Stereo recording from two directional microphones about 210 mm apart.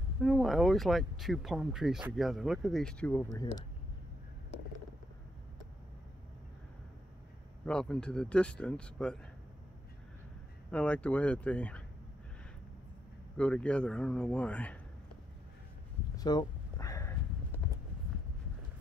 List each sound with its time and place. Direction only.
0.2 s speech: centre (ahead or behind)
7.6 s speech: 5° left (ahead or behind)
10.7 s speech: 5° left (ahead or behind)
13.4 s speech: 5° left (ahead or behind)
16.2 s a sound: 20° left (ahead or behind)